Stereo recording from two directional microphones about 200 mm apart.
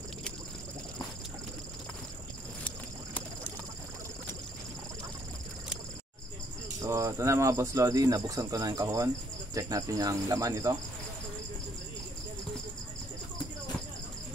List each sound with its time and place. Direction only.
6.8 s speech: 15° right (ahead or behind)